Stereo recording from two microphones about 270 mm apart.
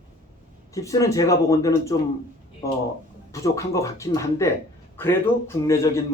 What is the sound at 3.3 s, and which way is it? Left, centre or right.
Speech, centre.